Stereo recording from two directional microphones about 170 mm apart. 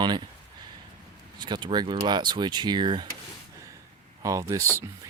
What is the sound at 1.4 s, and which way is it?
Speech, 25° right (ahead or behind).